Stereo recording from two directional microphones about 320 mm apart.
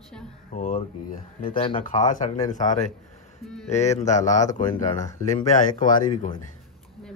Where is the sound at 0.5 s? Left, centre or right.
Left.